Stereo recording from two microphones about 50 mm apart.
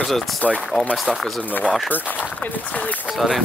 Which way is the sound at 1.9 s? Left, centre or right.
Left.